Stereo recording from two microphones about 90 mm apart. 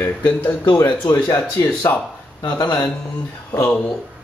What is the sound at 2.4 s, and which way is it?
Speech, 45° left (ahead or behind).